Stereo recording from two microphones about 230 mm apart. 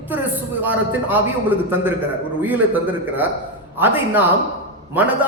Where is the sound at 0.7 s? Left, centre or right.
Centre.